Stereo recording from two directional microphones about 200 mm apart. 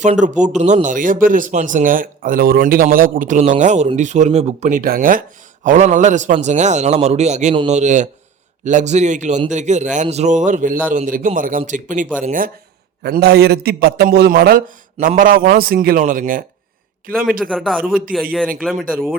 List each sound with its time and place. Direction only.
0.0 s a man's voice: 35° right (ahead or behind)
13.0 s a man's voice: 55° right (ahead or behind)
17.4 s speech: centre (ahead or behind)